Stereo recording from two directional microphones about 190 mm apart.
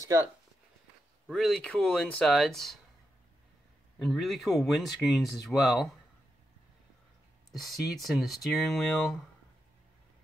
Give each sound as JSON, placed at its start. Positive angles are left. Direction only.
{"t": 0.0, "sound": "speech", "side_deg": -15}
{"t": 1.2, "sound": "speech", "side_deg": 0}
{"t": 4.0, "sound": "speech", "side_deg": 0}
{"t": 8.0, "sound": "speech", "side_deg": 0}